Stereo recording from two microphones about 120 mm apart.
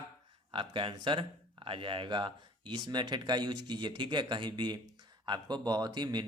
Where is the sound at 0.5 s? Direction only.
45° right (ahead or behind).